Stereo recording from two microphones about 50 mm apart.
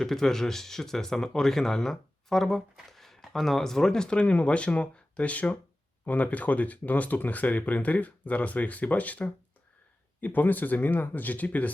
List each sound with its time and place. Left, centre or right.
0.0 s speech: centre; by 11.7 s left